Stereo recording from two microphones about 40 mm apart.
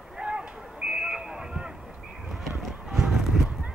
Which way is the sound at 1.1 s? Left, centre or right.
Centre.